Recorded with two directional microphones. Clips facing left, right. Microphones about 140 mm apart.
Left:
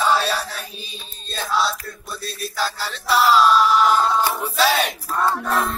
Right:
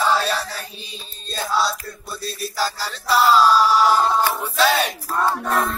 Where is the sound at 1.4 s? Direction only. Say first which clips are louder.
Even; 5° right (ahead or behind).